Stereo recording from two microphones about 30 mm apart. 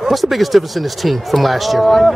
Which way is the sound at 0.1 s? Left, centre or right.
Centre.